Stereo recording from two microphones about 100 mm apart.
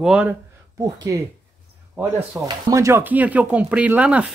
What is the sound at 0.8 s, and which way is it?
Speech, 40° right (ahead or behind).